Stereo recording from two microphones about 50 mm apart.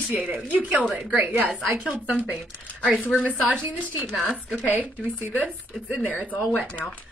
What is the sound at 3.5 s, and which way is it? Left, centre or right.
Speech, left.